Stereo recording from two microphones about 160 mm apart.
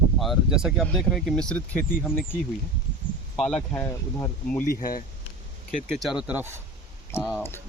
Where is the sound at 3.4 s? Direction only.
5° left (ahead or behind).